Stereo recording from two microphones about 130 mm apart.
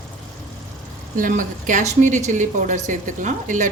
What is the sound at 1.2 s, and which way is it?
Speech, 90° right.